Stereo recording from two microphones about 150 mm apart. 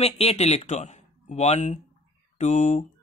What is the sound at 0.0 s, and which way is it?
Speech, 45° left (ahead or behind).